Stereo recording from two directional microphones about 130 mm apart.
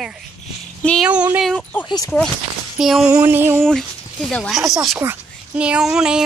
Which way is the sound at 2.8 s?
5° right (ahead or behind).